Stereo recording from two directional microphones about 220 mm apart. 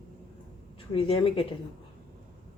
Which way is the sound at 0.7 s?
25° left (ahead or behind).